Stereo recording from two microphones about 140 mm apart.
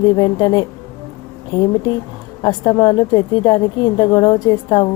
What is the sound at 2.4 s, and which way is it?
A woman's voice, 30° left (ahead or behind).